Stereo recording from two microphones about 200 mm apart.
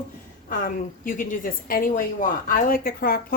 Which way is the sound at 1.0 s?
40° left (ahead or behind).